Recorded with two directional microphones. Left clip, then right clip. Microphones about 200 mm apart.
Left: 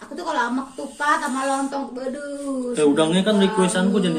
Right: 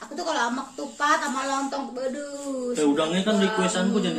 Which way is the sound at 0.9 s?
Centre (ahead or behind).